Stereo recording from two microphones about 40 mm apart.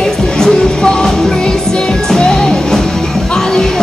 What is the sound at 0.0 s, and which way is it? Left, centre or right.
Music, centre.